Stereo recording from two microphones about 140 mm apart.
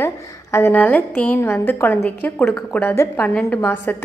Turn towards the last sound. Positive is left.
turn(degrees=15)  # may be behind; listen again after turning